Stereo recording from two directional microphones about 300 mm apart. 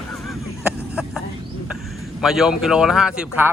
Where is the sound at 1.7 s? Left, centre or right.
Centre.